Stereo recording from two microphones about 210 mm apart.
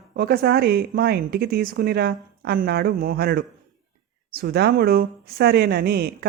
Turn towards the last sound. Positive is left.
turn(degrees=-50)  # may be behind; listen again after turning